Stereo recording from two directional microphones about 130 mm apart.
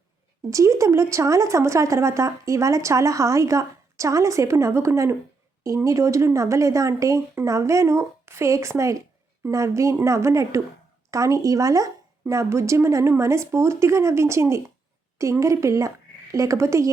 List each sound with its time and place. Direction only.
0.5 s speech: 25° right (ahead or behind)